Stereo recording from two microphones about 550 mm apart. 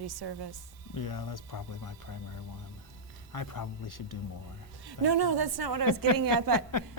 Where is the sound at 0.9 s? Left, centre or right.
Left.